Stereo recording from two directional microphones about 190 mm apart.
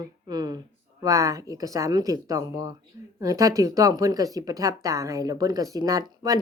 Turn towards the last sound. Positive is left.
turn(degrees=-20)  # may be behind; listen again after turning